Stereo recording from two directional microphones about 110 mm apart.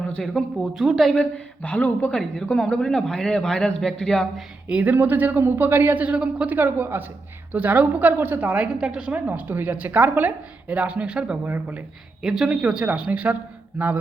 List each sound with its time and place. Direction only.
0.1 s a woman's voice: 5° left (ahead or behind)
4.7 s a woman's voice: 15° right (ahead or behind)